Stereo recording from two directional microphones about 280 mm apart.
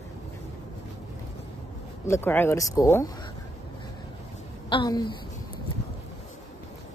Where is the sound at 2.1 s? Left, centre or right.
Centre.